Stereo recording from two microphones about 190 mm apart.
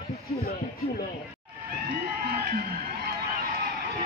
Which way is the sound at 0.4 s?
55° left (ahead or behind).